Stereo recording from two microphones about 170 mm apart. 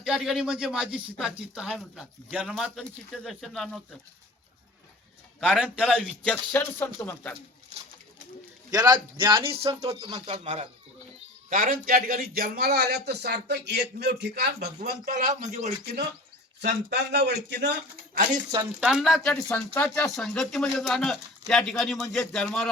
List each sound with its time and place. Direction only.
0.0 s speech: 5° right (ahead or behind)
5.6 s speech: 5° right (ahead or behind)
6.2 s speech: 10° left (ahead or behind)
8.7 s speech: 25° right (ahead or behind)
9.8 s speech: 20° right (ahead or behind)
10.2 s speech: 35° right (ahead or behind)
11.4 s a man's voice: 55° right (ahead or behind); by 14.7 s 75° right (ahead or behind)
14.8 s a man's voice: 60° right (ahead or behind); by 15.7 s 45° right (ahead or behind)
16.6 s a man's voice: 90° right
18.8 s speech: 5° right (ahead or behind)